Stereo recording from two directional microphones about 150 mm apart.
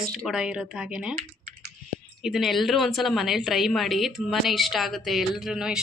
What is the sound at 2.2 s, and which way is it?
A woman's voice, centre (ahead or behind).